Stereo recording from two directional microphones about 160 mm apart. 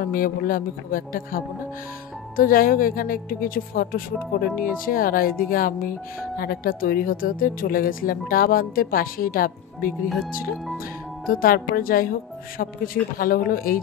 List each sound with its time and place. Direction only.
0.0 s speech: 60° left (ahead or behind)
11.2 s speech: 65° left (ahead or behind)